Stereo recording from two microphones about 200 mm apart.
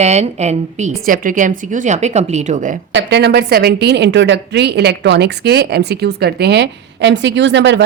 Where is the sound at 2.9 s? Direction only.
60° right (ahead or behind).